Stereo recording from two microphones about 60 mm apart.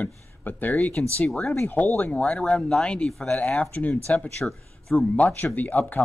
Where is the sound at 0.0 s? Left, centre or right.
Left.